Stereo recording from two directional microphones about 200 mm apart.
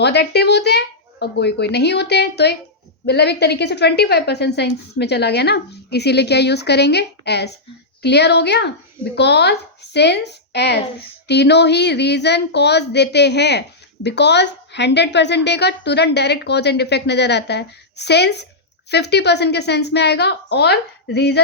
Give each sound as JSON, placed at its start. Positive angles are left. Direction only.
{"t": 0.0, "sound": "speech", "side_deg": 55}